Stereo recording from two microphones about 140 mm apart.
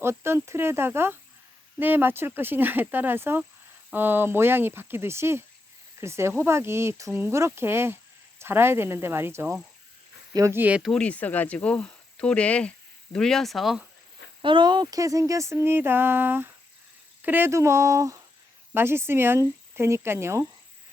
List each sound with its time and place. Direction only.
0.0 s speech: 20° right (ahead or behind)
10.9 s speech: 10° left (ahead or behind)
14.4 s speech: 35° right (ahead or behind); by 20.5 s 20° right (ahead or behind)